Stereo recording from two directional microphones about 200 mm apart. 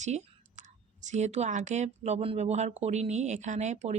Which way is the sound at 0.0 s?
35° right (ahead or behind).